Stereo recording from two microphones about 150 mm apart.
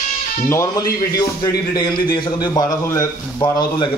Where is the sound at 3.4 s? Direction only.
30° left (ahead or behind).